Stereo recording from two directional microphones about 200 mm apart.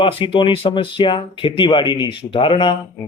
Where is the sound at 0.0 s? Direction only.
25° left (ahead or behind).